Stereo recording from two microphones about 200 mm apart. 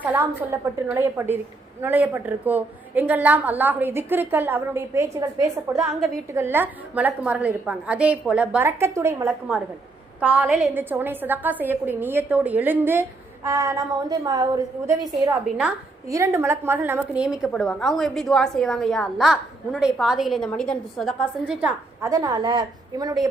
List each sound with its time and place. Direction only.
0.0 s a woman's voice: 10° right (ahead or behind)
15.4 s a woman's voice: 5° right (ahead or behind)
16.0 s a woman's voice: 15° right (ahead or behind)
22.0 s a woman's voice: 15° right (ahead or behind)